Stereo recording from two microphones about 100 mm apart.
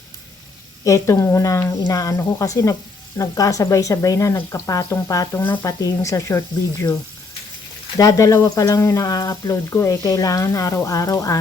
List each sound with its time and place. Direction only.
0.9 s speech: 30° left (ahead or behind)
7.9 s speech: 35° left (ahead or behind)